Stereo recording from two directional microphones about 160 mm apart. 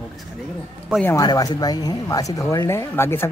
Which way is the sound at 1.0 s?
20° left (ahead or behind).